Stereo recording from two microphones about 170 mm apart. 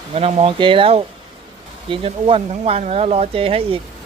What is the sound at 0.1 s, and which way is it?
Speech, 35° right (ahead or behind).